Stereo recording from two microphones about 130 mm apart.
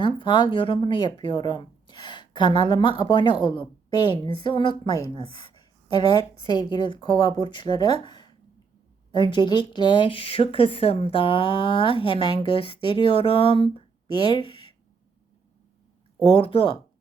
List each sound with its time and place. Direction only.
0.0 s speech: 35° left (ahead or behind)
16.3 s speech: 45° left (ahead or behind)